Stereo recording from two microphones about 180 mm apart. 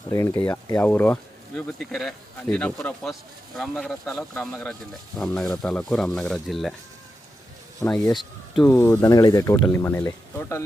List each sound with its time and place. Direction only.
0.1 s speech: 20° left (ahead or behind); by 6.7 s centre (ahead or behind)
8.1 s a sound: centre (ahead or behind)
8.7 s speech: 15° left (ahead or behind)